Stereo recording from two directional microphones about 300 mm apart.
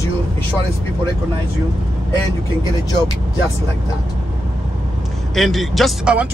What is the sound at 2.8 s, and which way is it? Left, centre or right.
Speech, centre.